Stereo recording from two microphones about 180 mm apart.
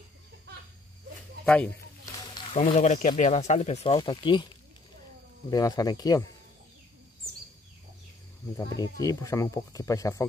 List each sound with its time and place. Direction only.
1.4 s speech: 10° left (ahead or behind)
2.5 s speech: 40° left (ahead or behind)
5.5 s speech: 20° left (ahead or behind)
8.5 s speech: 20° left (ahead or behind)